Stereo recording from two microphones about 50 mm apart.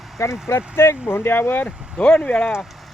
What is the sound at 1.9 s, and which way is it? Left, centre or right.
Speech, left.